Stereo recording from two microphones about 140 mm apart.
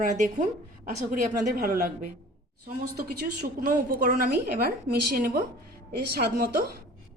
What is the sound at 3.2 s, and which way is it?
Speech, 90° right.